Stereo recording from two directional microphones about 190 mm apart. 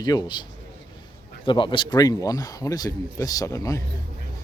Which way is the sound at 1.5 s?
25° left (ahead or behind).